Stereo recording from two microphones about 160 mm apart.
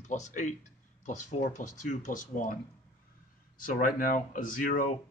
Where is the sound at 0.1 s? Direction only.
50° left (ahead or behind).